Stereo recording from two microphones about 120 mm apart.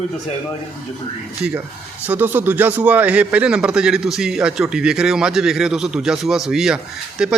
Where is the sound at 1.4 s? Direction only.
10° right (ahead or behind).